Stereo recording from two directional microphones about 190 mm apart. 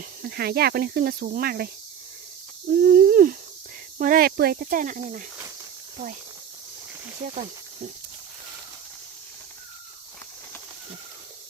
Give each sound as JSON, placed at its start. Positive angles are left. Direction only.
{"t": 0.0, "sound": "speech", "side_deg": -55}
{"t": 2.6, "sound": "a sound", "side_deg": -50}
{"t": 3.9, "sound": "speech", "side_deg": -45}